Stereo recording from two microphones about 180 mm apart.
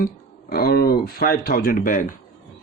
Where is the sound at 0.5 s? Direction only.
60° left (ahead or behind).